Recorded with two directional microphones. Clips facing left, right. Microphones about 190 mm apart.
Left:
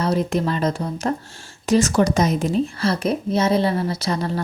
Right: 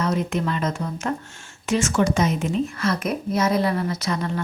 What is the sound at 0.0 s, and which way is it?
A woman's voice, 35° left (ahead or behind).